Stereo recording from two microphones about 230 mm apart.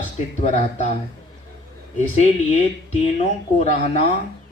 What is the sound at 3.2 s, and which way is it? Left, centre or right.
Speech, left.